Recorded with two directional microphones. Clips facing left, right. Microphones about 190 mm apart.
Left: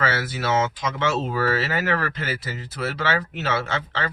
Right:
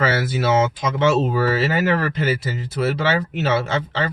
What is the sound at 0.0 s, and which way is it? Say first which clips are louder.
Speech: right 5 dB; 20° right (ahead or behind).